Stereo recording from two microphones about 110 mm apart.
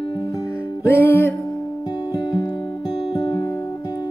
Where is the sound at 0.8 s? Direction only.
20° left (ahead or behind).